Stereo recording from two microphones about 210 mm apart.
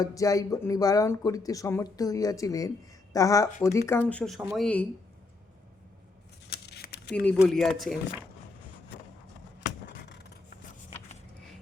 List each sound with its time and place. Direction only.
0.0 s speech: 15° left (ahead or behind)
6.5 s a sound: 50° left (ahead or behind)
7.3 s speech: centre (ahead or behind)
9.8 s scissors: 55° left (ahead or behind)